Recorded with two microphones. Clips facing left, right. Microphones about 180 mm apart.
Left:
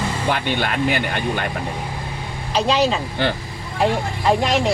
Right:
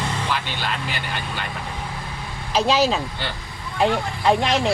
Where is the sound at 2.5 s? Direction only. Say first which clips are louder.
Left 1 dB; 5° right (ahead or behind).